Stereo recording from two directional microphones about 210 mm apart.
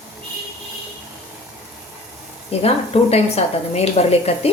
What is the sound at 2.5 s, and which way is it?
Speech, 30° left (ahead or behind).